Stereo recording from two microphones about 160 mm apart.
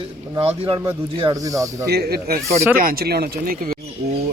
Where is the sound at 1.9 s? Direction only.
80° right.